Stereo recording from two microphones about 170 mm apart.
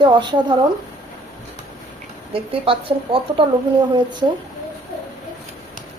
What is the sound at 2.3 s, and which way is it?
Speech, 30° right (ahead or behind).